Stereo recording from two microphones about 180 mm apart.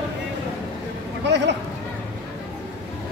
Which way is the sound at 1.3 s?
75° right (ahead or behind).